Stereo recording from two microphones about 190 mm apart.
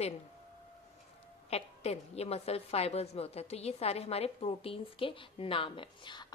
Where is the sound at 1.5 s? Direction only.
35° left (ahead or behind).